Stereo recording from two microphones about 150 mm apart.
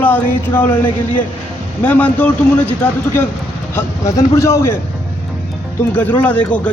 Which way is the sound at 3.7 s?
20° left (ahead or behind).